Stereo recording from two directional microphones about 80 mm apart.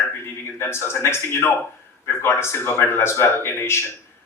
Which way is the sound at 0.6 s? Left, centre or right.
Left.